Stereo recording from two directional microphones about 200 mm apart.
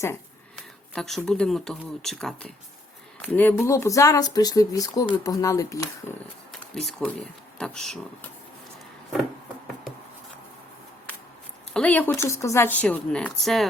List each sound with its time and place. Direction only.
0.9 s a woman's voice: centre (ahead or behind)
6.5 s speech: centre (ahead or behind)
11.7 s a woman's voice: 5° left (ahead or behind)